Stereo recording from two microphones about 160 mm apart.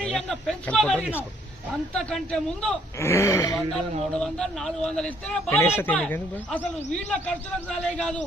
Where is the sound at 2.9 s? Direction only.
15° left (ahead or behind).